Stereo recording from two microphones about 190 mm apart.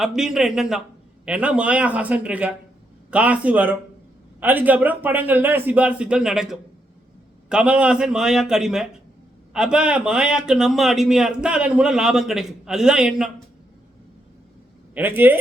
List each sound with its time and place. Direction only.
0.0 s a man's voice: centre (ahead or behind)
14.9 s a man's voice: 10° right (ahead or behind)